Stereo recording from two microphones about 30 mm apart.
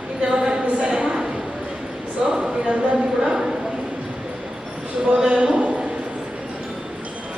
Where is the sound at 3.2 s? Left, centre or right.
Centre.